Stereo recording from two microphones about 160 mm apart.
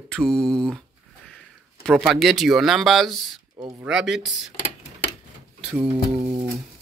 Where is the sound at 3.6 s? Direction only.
20° right (ahead or behind).